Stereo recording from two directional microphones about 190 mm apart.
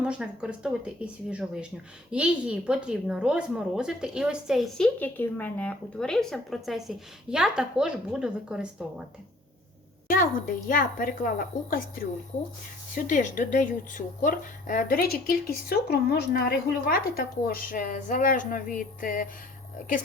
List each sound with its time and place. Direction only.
0.0 s a woman's voice: 5° right (ahead or behind)
10.1 s speech: 45° left (ahead or behind)